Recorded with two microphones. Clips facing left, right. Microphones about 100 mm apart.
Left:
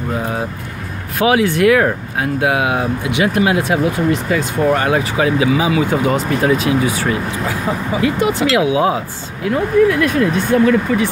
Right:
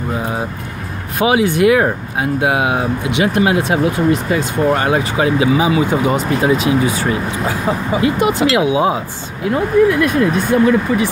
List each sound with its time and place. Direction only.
1.1 s speech: 20° right (ahead or behind)